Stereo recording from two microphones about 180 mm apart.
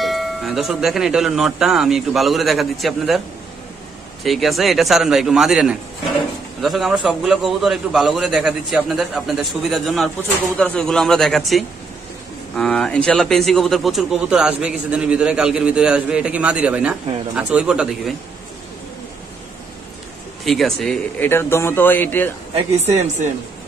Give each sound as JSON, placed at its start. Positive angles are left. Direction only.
{"t": 0.0, "sound": "a man's voice", "side_deg": 0}
{"t": 4.2, "sound": "a man's voice", "side_deg": 0}
{"t": 20.4, "sound": "a man's voice", "side_deg": 0}
{"t": 21.3, "sound": "speech", "side_deg": 15}
{"t": 22.8, "sound": "speech", "side_deg": -40}